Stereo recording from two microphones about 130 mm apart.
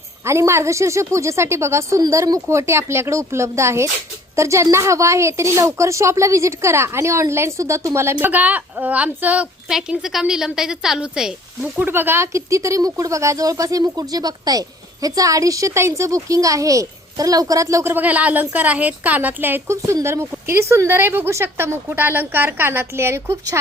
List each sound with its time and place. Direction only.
0.3 s a woman's voice: 20° right (ahead or behind)